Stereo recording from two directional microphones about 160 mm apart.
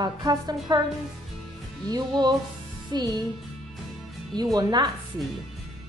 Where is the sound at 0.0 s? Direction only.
25° right (ahead or behind).